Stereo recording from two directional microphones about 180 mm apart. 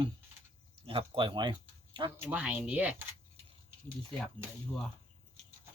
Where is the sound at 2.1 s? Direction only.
10° right (ahead or behind).